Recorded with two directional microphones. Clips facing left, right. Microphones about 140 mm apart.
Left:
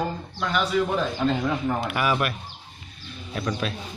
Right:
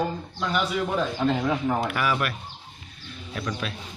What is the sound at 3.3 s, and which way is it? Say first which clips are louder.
Speech: left 3 dB; 35° left (ahead or behind).